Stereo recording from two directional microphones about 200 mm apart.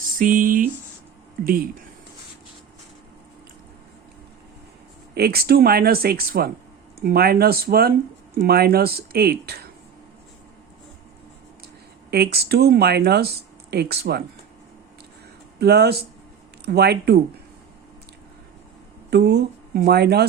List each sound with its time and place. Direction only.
0.0 s speech: 45° right (ahead or behind)
5.1 s speech: 50° right (ahead or behind)
12.1 s speech: 50° right (ahead or behind)
15.5 s speech: 55° right (ahead or behind)
19.1 s speech: 55° right (ahead or behind)